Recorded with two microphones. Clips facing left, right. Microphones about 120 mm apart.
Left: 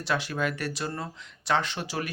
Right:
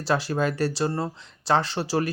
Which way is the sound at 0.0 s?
35° right (ahead or behind).